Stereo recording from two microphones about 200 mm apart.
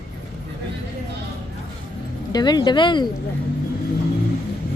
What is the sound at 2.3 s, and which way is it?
Speech, 20° left (ahead or behind).